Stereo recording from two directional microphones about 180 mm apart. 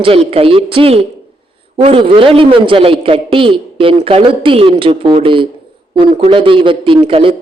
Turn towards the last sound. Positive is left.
turn(degrees=-30)  # may be behind; listen again after turning